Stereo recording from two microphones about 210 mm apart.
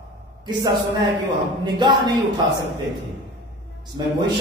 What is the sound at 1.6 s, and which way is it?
Speech, 20° right (ahead or behind).